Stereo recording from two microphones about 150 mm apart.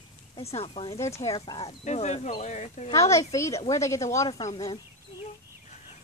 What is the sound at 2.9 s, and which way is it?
Speech, 20° left (ahead or behind).